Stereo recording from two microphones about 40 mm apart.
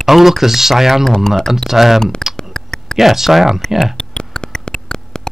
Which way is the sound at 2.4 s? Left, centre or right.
Centre.